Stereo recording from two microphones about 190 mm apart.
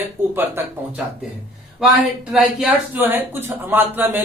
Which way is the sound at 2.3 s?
5° right (ahead or behind).